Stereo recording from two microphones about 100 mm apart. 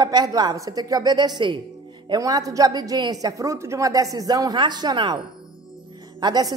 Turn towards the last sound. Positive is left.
turn(degrees=-45)  # may be behind; listen again after turning